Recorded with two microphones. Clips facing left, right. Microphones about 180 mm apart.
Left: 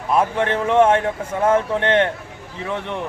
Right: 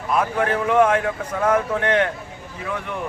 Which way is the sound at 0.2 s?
25° left (ahead or behind).